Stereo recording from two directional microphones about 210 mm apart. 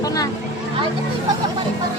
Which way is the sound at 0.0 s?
15° left (ahead or behind).